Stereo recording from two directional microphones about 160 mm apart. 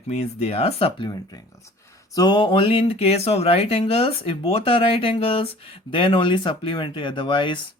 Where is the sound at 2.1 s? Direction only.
25° left (ahead or behind).